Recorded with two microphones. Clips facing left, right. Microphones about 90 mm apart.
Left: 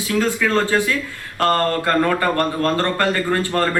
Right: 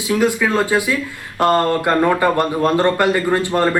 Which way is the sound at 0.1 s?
15° right (ahead or behind).